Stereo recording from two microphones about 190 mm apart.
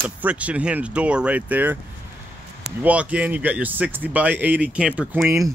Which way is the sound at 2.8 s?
5° right (ahead or behind).